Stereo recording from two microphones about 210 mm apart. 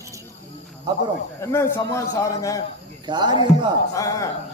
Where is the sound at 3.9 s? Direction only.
15° left (ahead or behind).